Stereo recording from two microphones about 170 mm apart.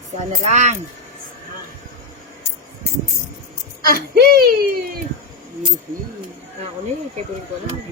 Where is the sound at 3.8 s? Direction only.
60° right (ahead or behind).